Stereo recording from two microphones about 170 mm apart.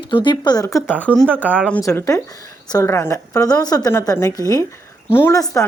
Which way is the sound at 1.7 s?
20° left (ahead or behind).